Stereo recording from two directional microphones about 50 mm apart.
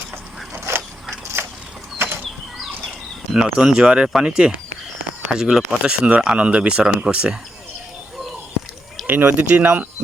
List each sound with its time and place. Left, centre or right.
1.4 s a sound: right
3.3 s speech: centre
9.0 s speech: right